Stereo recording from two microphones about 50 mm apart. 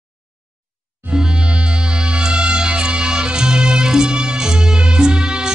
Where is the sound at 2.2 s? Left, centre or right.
Centre.